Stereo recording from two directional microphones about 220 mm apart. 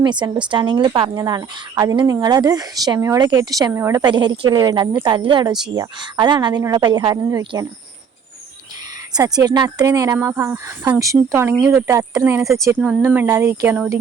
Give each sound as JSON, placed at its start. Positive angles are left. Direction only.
{"t": 0.0, "sound": "speech", "side_deg": -20}
{"t": 9.1, "sound": "speech", "side_deg": -15}